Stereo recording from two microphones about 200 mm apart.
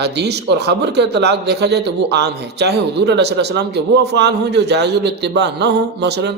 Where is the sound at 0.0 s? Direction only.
55° right (ahead or behind).